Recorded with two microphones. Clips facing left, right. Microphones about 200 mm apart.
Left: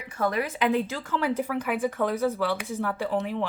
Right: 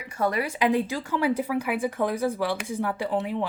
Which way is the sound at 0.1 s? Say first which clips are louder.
Right 1 dB; 10° right (ahead or behind).